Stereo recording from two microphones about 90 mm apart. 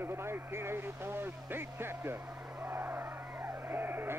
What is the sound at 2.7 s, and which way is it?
Music, 25° right (ahead or behind).